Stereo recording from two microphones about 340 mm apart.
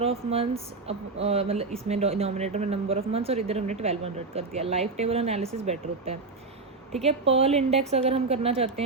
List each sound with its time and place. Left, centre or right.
0.0 s speech: centre
7.0 s speech: centre